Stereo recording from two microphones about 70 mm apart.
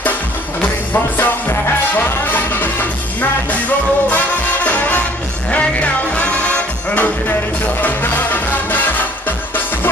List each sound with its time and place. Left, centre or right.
0.6 s music: left